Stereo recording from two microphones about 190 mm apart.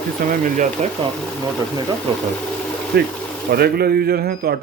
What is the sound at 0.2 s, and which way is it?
Speech, 50° right (ahead or behind).